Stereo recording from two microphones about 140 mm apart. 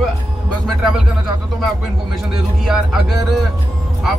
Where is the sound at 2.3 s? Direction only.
Centre (ahead or behind).